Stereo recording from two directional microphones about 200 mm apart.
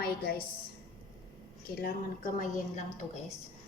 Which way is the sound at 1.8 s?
40° left (ahead or behind).